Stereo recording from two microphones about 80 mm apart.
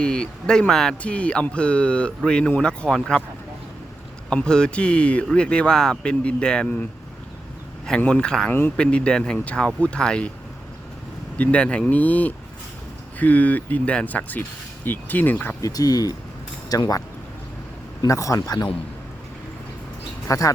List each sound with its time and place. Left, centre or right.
0.0 s speech: centre
4.3 s speech: centre
7.9 s speech: centre
8.4 s speech: left
8.7 s speech: centre
11.3 s speech: centre
15.6 s a man's voice: left
18.0 s a man's voice: left
20.2 s speech: left